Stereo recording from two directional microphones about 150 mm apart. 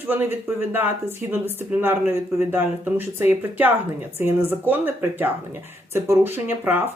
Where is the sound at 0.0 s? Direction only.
15° right (ahead or behind).